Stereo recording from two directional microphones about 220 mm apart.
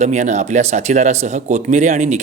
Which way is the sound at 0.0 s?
30° right (ahead or behind).